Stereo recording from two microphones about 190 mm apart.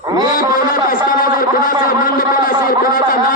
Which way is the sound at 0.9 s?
50° left (ahead or behind).